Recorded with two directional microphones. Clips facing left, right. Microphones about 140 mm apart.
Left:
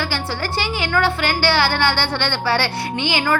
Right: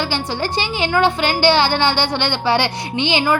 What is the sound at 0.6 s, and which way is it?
A woman's voice, 20° right (ahead or behind).